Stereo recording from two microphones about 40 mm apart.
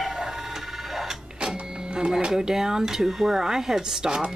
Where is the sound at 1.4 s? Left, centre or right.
Right.